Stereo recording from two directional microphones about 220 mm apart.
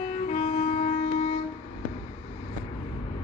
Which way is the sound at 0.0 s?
30° left (ahead or behind).